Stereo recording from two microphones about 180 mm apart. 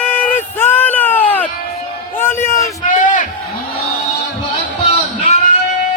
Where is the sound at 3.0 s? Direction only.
45° left (ahead or behind).